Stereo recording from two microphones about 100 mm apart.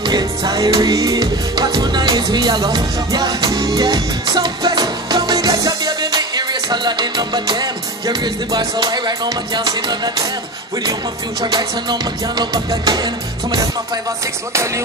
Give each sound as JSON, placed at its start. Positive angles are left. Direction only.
{"t": 0.0, "sound": "music", "side_deg": -45}
{"t": 11.5, "sound": "music", "side_deg": -45}